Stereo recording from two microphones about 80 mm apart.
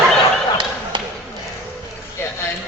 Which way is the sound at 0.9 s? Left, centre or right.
Right.